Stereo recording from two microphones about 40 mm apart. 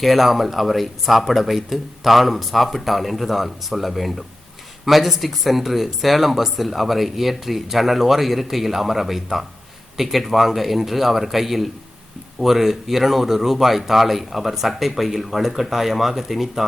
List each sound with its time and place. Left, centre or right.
0.0 s speech: centre